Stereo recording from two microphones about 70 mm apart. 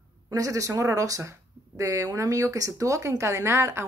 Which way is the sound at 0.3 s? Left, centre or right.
Right.